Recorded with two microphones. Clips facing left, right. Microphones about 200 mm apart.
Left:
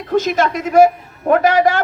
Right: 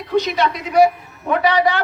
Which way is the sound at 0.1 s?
45° left (ahead or behind).